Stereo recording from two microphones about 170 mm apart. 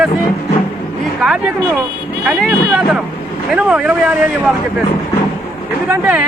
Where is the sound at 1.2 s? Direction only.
5° right (ahead or behind).